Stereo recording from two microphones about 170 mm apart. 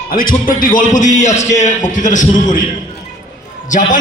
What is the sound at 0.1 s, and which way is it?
A man's voice, 55° left (ahead or behind).